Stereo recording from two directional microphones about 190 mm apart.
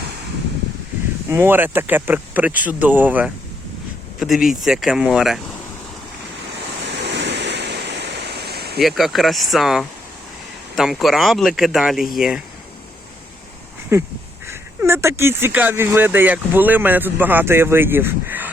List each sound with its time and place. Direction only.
1.3 s speech: 10° right (ahead or behind)
6.9 s waves: 65° right (ahead or behind)
8.8 s speech: centre (ahead or behind)
13.9 s speech: 15° right (ahead or behind)